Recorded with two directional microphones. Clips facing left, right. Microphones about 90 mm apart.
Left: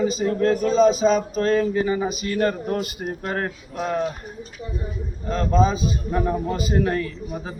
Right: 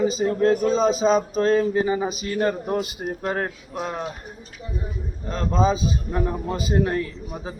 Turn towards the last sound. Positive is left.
turn(degrees=-25)  # may be behind; listen again after turning